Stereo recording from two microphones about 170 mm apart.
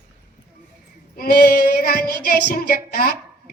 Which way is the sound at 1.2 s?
70° left (ahead or behind).